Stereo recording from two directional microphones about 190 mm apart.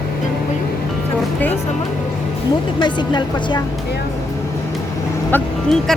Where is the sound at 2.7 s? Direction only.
25° left (ahead or behind).